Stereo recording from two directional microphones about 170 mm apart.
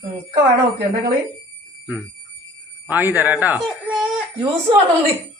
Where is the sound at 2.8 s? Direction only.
10° right (ahead or behind).